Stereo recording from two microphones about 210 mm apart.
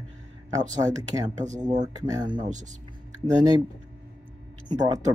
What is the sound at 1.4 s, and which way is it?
Speech, 35° right (ahead or behind).